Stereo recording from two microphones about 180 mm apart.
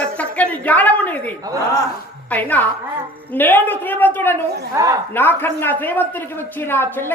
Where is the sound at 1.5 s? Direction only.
20° right (ahead or behind).